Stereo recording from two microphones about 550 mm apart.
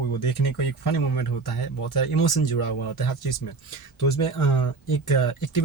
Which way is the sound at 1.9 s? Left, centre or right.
Left.